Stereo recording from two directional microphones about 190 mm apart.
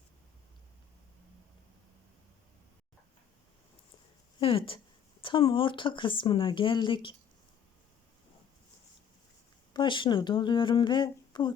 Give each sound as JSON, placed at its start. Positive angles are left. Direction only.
{"t": 4.4, "sound": "speech", "side_deg": 30}
{"t": 9.7, "sound": "speech", "side_deg": 25}